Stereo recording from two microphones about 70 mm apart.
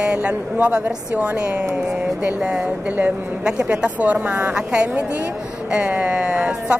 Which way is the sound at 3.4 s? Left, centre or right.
Centre.